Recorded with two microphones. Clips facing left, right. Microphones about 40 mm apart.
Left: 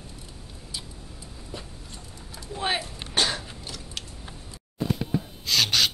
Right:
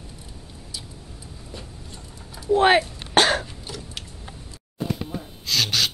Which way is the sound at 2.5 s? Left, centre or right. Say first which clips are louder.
Right 12 dB; right.